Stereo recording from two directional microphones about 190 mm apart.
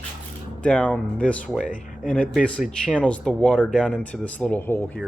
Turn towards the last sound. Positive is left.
turn(degrees=10)  # may be behind; listen again after turning